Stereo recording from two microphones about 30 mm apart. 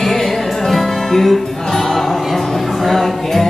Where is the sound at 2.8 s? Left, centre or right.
Centre.